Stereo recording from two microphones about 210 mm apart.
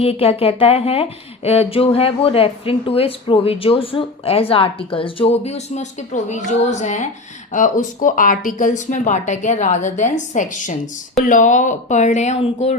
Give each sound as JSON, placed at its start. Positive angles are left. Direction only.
{"t": 0.0, "sound": "speech", "side_deg": 30}